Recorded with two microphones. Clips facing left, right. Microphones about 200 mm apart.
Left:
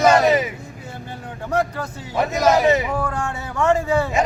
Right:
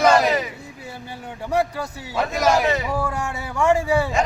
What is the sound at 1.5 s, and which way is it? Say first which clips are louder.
Speech: even; 10° right (ahead or behind).